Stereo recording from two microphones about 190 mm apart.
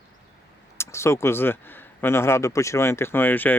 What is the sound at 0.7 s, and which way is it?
Speech, 15° left (ahead or behind).